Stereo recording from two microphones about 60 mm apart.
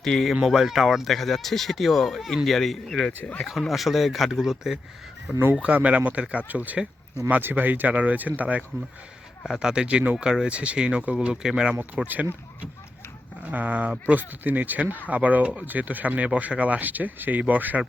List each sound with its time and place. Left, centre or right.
0.0 s speech: centre
0.4 s speech: centre
3.2 s speech: left
3.4 s speech: centre; by 8.6 s right
9.5 s speech: centre
12.0 s speech: right
13.4 s speech: right